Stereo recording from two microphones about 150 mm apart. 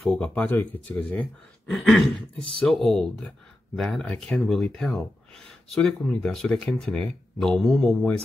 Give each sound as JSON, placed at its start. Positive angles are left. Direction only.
{"t": 0.0, "sound": "speech", "side_deg": 5}